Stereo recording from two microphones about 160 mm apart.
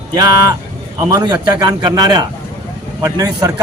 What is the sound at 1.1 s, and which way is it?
A man's voice, 25° right (ahead or behind).